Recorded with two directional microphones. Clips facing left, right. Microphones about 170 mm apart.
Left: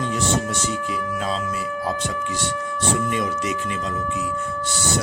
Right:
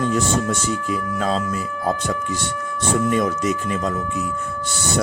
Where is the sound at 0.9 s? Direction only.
45° right (ahead or behind).